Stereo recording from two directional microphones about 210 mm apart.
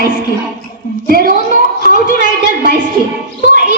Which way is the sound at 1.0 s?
45° right (ahead or behind).